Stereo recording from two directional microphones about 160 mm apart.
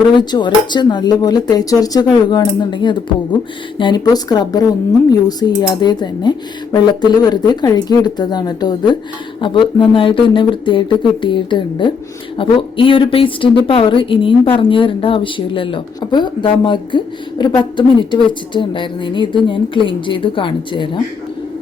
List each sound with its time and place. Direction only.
0.2 s a woman's voice: 30° left (ahead or behind)